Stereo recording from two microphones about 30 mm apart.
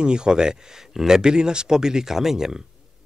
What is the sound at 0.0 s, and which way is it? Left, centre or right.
Speech, right.